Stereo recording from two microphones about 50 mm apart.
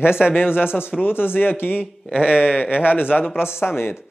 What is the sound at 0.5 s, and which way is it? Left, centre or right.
Speech, centre.